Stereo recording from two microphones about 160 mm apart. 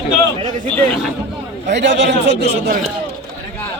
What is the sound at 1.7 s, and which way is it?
Speech, 90° right.